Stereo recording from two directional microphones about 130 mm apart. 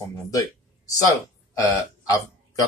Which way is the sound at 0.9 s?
25° left (ahead or behind).